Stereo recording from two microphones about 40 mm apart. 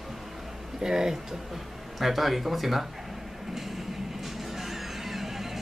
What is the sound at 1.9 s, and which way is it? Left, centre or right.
Speech, centre.